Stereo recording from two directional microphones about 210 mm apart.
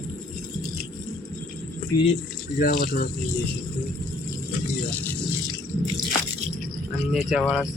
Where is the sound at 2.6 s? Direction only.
45° left (ahead or behind).